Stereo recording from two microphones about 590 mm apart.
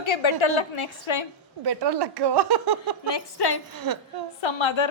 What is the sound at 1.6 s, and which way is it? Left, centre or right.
A woman's voice, right.